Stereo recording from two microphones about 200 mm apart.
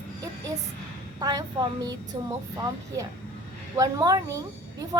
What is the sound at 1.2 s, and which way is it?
Speech, 20° right (ahead or behind).